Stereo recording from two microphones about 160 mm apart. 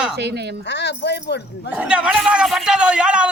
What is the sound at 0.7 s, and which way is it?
Speech, 90° left.